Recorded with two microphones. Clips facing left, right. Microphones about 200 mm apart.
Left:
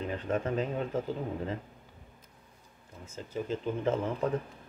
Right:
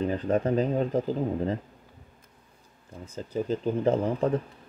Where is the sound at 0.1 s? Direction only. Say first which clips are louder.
Right 6 dB; 35° right (ahead or behind).